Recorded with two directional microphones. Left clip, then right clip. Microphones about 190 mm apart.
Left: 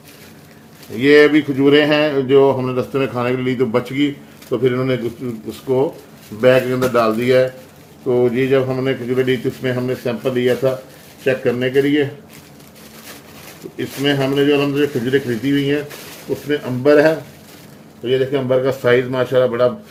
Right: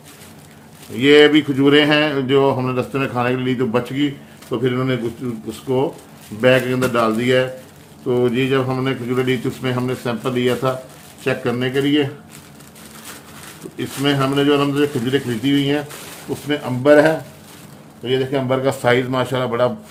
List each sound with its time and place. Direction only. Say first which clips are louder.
1.0 s a man's voice: even; 15° right (ahead or behind)
8.0 s speech: left 2 dB; 20° right (ahead or behind)
13.7 s speech: left 1 dB; 20° right (ahead or behind)